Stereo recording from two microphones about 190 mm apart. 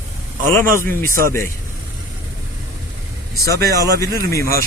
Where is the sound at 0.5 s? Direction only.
15° left (ahead or behind).